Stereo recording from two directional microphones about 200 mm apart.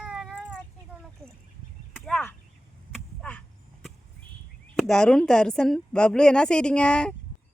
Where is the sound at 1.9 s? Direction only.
5° left (ahead or behind).